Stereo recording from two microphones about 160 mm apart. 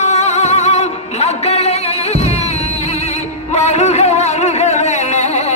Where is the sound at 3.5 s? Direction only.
45° left (ahead or behind).